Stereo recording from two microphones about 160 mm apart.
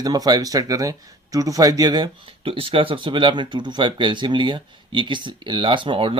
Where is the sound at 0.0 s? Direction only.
25° right (ahead or behind).